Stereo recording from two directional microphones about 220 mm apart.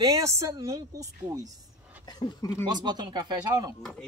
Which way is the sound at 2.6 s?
20° right (ahead or behind).